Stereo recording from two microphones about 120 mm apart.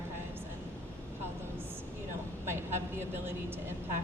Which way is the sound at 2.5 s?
20° right (ahead or behind).